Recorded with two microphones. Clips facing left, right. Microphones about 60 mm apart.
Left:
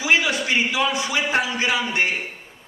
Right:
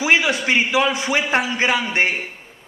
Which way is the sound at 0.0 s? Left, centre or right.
Right.